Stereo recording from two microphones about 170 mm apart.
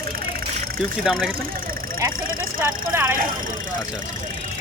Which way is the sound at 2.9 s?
10° right (ahead or behind).